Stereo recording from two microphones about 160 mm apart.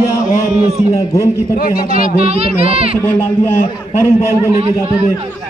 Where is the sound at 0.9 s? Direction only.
20° left (ahead or behind).